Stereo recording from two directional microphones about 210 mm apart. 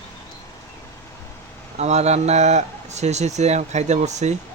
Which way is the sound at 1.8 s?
30° right (ahead or behind).